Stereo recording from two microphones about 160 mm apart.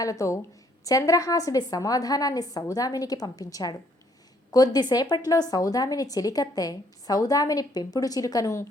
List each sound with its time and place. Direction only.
0.0 s a woman's voice: 20° left (ahead or behind)